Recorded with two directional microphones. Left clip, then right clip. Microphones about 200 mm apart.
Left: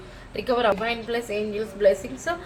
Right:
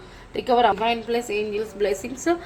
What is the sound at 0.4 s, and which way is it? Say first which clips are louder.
A woman's voice: right 3 dB; 40° right (ahead or behind).